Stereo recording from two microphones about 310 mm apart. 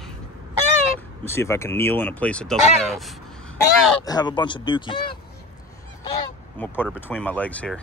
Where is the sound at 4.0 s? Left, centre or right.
Centre.